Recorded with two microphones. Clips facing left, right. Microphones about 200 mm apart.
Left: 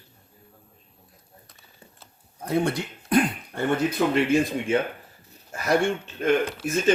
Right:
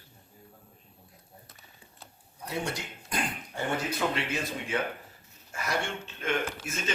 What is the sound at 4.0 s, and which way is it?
Speech, 5° left (ahead or behind).